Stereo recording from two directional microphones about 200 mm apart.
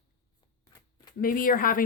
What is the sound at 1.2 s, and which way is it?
Speech, 45° left (ahead or behind).